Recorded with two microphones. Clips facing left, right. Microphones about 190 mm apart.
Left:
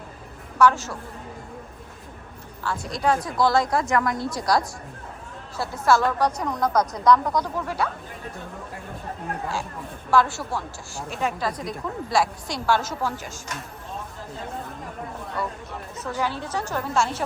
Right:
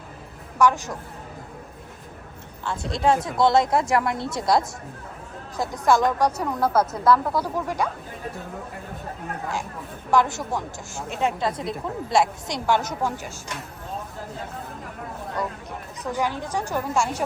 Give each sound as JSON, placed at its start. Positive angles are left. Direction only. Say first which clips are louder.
{"t": 0.6, "sound": "a woman's voice", "louder": "left 1 dB", "side_deg": -15}
{"t": 2.6, "sound": "a woman's voice", "louder": "right 2 dB", "side_deg": -25}
{"t": 10.1, "sound": "a woman's voice", "louder": "even", "side_deg": -20}
{"t": 16.0, "sound": "a woman's voice", "louder": "right 2 dB", "side_deg": -15}